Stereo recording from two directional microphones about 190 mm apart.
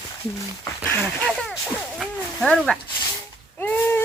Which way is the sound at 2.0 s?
Centre (ahead or behind).